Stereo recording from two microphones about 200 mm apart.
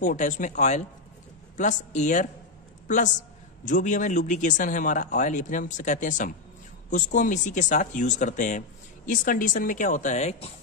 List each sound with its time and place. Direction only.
0.0 s speech: 40° left (ahead or behind)
3.6 s speech: 40° left (ahead or behind)